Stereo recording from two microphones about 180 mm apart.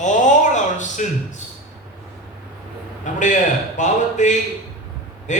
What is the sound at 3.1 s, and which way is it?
A man's voice, 45° left (ahead or behind).